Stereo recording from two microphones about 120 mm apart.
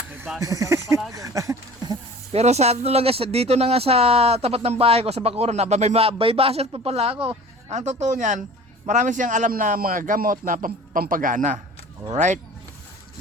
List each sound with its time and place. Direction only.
0.3 s speech: 30° right (ahead or behind)
1.1 s a sound: 30° right (ahead or behind)
2.3 s speech: 65° right (ahead or behind)
7.7 s a man's voice: 80° right